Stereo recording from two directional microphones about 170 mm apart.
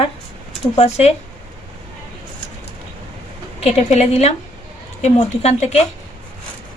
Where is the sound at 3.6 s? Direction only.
40° left (ahead or behind).